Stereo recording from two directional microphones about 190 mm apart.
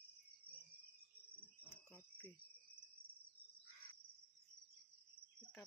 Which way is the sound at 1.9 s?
10° left (ahead or behind).